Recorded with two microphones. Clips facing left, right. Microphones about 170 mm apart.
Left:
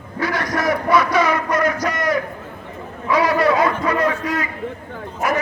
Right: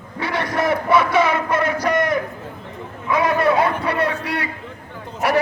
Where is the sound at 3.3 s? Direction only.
55° right (ahead or behind).